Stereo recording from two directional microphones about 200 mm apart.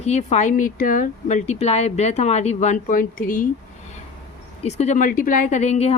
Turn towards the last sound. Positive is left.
turn(degrees=30)  # may be behind; listen again after turning